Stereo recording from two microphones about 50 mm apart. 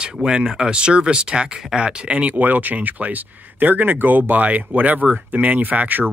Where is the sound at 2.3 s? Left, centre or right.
Right.